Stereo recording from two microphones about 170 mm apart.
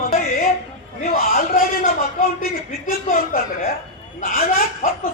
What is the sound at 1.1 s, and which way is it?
Speech, 55° left (ahead or behind).